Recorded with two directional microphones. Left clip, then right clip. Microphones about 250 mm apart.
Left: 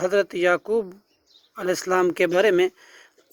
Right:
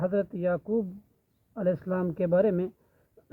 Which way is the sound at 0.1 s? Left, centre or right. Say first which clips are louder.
Left 8 dB; left.